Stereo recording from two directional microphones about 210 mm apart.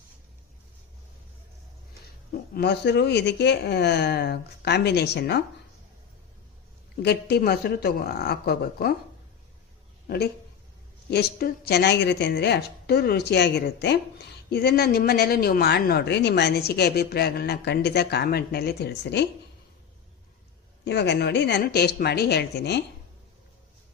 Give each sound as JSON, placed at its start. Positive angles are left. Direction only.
{"t": 2.3, "sound": "a woman's voice", "side_deg": 50}
{"t": 6.9, "sound": "a woman's voice", "side_deg": 50}
{"t": 11.1, "sound": "a woman's voice", "side_deg": 45}
{"t": 20.8, "sound": "a woman's voice", "side_deg": 55}